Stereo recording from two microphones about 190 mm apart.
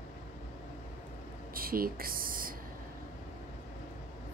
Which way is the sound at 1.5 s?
50° right (ahead or behind).